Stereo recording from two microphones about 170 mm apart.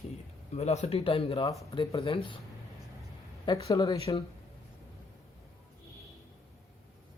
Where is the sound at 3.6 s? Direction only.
20° left (ahead or behind).